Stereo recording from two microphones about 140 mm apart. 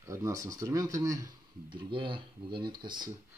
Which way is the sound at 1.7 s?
35° right (ahead or behind).